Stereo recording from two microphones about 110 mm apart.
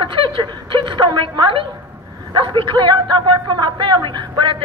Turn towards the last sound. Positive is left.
turn(degrees=-45)  # may be behind; listen again after turning